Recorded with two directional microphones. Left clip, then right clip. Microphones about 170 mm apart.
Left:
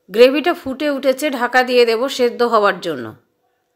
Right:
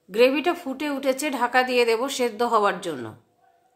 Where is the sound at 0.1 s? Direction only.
30° left (ahead or behind).